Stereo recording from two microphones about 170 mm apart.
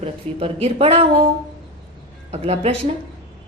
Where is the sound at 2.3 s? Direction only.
40° right (ahead or behind).